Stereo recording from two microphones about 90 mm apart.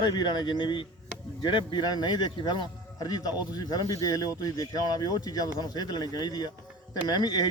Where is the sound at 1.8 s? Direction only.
50° left (ahead or behind).